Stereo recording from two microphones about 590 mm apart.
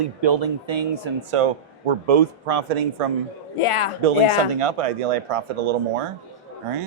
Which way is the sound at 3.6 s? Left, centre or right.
Left.